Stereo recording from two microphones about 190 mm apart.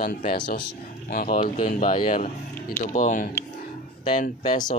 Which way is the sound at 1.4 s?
45° left (ahead or behind).